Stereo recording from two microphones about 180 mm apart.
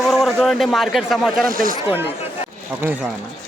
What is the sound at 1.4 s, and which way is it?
Speech, 50° right (ahead or behind).